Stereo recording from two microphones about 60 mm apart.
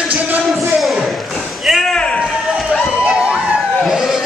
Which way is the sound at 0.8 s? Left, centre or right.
Centre.